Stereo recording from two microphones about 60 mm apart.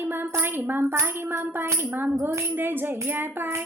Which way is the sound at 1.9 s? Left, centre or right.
Right.